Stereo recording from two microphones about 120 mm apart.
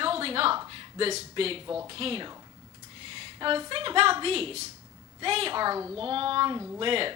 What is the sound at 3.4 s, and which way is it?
A woman's voice, 45° right (ahead or behind).